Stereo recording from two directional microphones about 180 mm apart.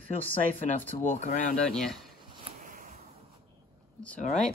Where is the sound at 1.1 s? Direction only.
45° left (ahead or behind).